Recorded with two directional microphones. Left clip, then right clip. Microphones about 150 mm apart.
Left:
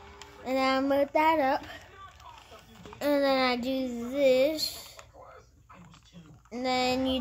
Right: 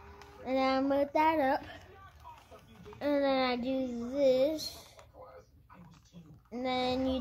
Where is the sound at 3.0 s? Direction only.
20° left (ahead or behind).